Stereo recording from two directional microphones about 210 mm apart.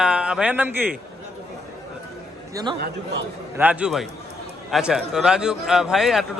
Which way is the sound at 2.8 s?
50° right (ahead or behind).